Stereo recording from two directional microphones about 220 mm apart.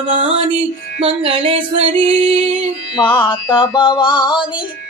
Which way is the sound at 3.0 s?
20° left (ahead or behind).